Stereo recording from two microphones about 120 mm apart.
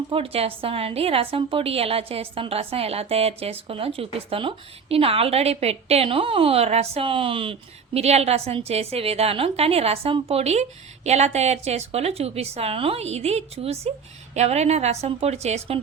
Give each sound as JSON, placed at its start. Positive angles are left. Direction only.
{"t": 0.1, "sound": "a woman's voice", "side_deg": -50}
{"t": 7.9, "sound": "a woman's voice", "side_deg": -60}